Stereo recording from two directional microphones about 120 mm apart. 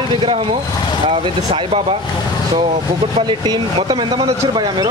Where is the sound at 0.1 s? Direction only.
50° right (ahead or behind).